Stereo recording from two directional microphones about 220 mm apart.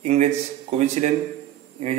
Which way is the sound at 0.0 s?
30° right (ahead or behind).